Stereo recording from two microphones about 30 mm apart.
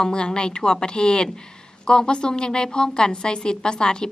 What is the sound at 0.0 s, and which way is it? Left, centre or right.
A woman's voice, left.